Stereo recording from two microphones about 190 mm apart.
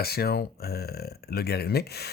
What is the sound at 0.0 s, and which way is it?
Speech, 55° left (ahead or behind).